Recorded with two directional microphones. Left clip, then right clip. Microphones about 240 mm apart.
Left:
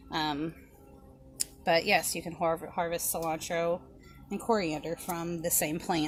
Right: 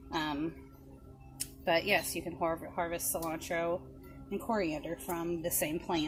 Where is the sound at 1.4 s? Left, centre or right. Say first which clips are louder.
Left 4 dB; left.